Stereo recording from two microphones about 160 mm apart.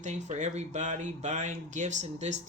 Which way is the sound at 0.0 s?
45° right (ahead or behind).